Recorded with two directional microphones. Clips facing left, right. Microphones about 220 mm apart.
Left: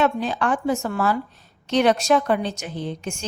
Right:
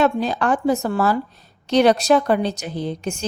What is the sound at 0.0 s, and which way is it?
A woman's voice, 40° right (ahead or behind).